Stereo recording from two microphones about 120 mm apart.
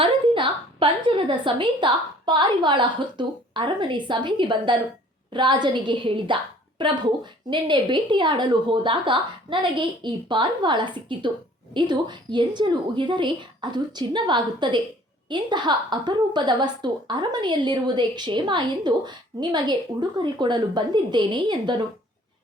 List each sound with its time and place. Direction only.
0.0 s a woman's voice: 45° right (ahead or behind)